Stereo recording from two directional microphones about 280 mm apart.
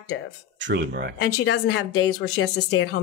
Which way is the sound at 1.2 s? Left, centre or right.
Left.